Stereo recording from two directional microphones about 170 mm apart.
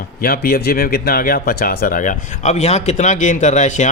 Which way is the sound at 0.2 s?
60° left (ahead or behind).